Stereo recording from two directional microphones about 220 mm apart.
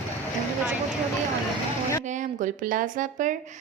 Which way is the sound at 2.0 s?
35° right (ahead or behind).